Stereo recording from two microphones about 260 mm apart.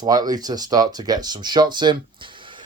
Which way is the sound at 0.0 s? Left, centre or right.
Centre.